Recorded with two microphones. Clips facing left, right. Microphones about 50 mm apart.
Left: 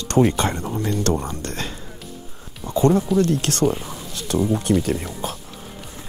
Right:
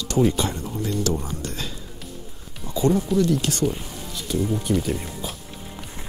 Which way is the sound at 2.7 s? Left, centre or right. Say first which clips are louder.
Left 4 dB; left.